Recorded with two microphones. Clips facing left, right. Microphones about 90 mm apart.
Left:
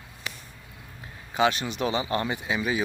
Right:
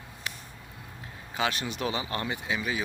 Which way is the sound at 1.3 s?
20° left (ahead or behind).